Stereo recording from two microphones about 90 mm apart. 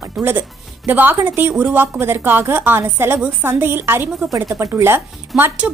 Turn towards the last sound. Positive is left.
turn(degrees=-20)  # may be behind; listen again after turning